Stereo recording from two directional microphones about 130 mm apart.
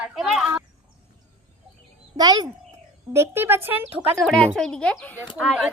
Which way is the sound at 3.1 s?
20° right (ahead or behind).